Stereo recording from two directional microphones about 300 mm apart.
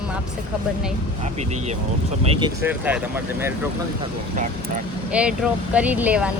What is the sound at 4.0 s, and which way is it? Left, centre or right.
Speech, right.